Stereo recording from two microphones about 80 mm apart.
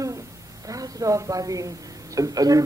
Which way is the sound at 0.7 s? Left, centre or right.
Right.